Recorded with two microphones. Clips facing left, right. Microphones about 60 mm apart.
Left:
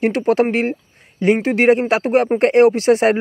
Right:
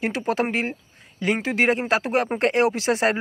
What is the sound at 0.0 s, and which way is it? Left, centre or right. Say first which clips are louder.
Speech: left 8 dB; left.